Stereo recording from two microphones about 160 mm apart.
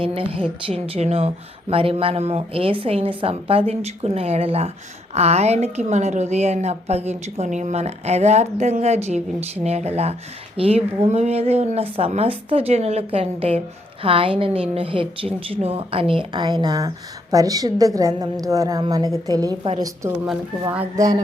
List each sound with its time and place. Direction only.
0.0 s a woman's voice: 35° right (ahead or behind)